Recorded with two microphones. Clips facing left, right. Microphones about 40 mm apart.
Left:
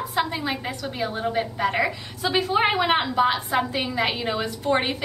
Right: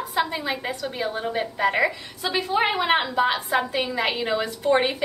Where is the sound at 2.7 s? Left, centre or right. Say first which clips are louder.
Even; centre.